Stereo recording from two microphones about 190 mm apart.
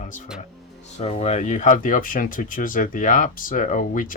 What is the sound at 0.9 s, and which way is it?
Speech, 35° left (ahead or behind).